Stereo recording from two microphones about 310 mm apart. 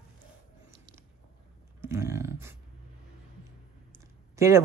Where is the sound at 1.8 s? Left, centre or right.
Centre.